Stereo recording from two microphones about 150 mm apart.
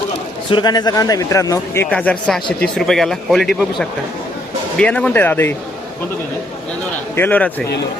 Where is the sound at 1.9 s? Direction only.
10° left (ahead or behind).